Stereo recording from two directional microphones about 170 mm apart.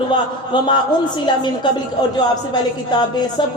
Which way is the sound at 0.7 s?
25° left (ahead or behind).